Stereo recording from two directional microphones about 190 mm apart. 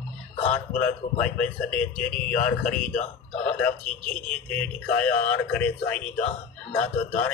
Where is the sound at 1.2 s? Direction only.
5° left (ahead or behind).